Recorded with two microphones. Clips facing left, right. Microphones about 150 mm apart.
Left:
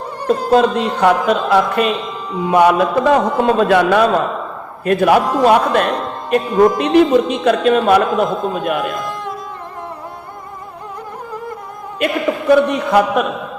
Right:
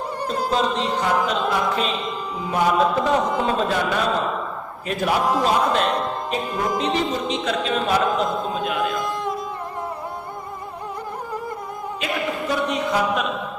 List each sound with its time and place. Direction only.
0.5 s a man's voice: 55° left (ahead or behind)
11.9 s speech: 60° left (ahead or behind)